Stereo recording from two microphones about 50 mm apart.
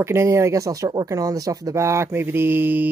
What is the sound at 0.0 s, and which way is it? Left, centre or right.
Speech, right.